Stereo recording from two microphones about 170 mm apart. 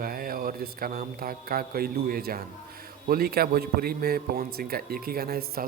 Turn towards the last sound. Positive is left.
turn(degrees=-65)  # may be behind; listen again after turning